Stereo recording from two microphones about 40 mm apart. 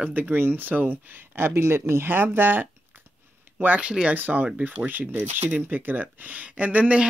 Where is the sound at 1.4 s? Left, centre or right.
Right.